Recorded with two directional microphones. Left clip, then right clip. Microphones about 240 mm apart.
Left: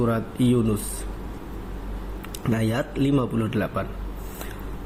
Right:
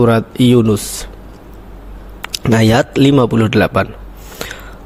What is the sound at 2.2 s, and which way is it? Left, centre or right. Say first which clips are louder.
A man's voice: right 14 dB; right.